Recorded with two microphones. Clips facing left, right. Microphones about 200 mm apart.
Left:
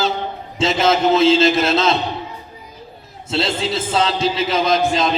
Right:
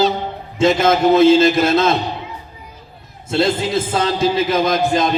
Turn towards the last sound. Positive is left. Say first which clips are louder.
# right 1 dB
turn(degrees=-50)  # may be behind; listen again after turning